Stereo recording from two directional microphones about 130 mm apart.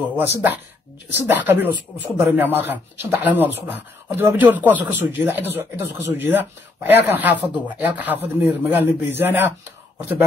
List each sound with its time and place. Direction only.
0.1 s speech: 15° right (ahead or behind)